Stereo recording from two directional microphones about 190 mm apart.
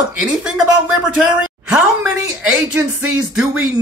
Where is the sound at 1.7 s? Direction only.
5° right (ahead or behind).